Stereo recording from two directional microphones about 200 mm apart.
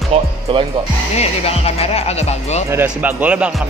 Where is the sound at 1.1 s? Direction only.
30° left (ahead or behind).